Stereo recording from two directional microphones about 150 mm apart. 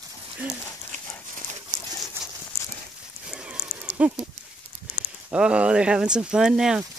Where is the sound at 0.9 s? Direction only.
55° right (ahead or behind).